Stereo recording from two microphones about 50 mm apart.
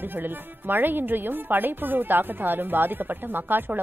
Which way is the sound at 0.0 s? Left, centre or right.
Right.